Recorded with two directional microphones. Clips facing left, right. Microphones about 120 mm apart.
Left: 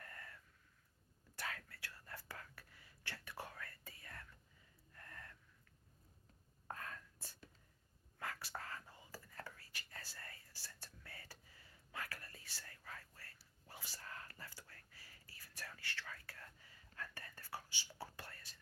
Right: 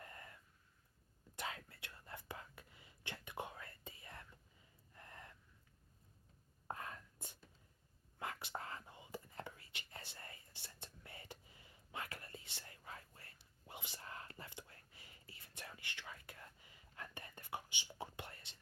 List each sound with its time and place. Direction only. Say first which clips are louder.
0.0 s a sound: right 1 dB; 20° right (ahead or behind)
1.4 s whispering: right 1 dB; 20° right (ahead or behind)
4.9 s gasp: right 1 dB; 20° right (ahead or behind)
6.7 s whispering: right 2 dB; 20° right (ahead or behind)